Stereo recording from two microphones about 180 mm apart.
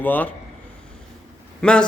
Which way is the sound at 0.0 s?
10° left (ahead or behind).